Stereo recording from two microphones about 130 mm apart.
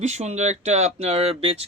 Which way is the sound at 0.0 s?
60° right (ahead or behind).